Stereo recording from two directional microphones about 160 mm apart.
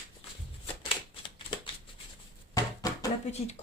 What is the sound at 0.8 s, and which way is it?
Typewriter, 35° left (ahead or behind).